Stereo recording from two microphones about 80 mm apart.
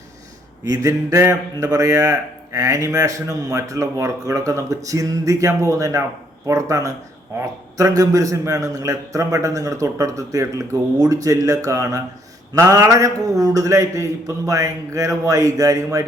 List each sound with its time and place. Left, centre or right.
0.6 s a man's voice: right